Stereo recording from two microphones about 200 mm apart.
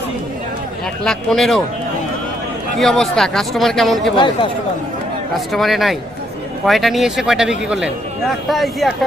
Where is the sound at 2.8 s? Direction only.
Centre (ahead or behind).